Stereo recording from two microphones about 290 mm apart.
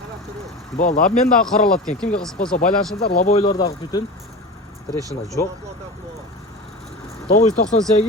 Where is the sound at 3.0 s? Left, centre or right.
Left; by 4.0 s centre.